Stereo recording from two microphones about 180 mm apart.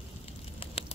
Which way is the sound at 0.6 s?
30° left (ahead or behind).